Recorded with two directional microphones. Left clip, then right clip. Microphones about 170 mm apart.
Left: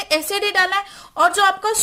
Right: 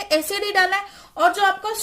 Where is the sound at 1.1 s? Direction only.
50° left (ahead or behind).